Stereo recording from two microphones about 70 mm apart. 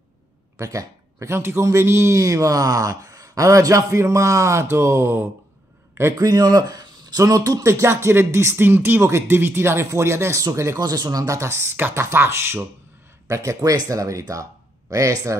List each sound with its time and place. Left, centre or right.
0.6 s speech: right
1.6 s speech: right
6.1 s speech: right
8.6 s speech: right
10.8 s speech: right
11.3 s speech: right
13.3 s speech: right
13.6 s speech: right
13.8 s speech: right